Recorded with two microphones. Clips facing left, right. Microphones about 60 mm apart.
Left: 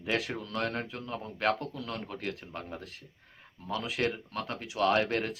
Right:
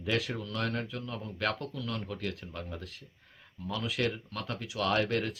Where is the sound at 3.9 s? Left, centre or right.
Left.